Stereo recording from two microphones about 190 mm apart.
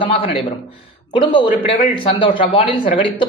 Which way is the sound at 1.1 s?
25° left (ahead or behind).